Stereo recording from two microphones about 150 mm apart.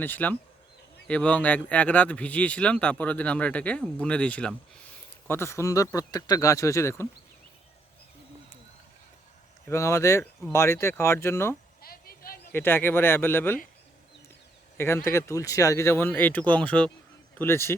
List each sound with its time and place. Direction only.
0.0 s speech: 10° left (ahead or behind)
9.6 s speech: 20° left (ahead or behind)
11.8 s a sound: 80° left
12.5 s speech: 15° left (ahead or behind)
14.8 s speech: 15° left (ahead or behind)